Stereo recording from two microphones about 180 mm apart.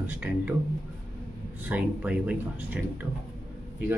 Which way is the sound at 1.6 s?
5° right (ahead or behind).